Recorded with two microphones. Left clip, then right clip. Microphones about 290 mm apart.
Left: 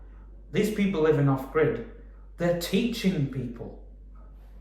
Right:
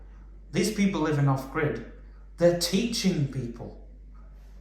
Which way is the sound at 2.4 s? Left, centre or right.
Centre.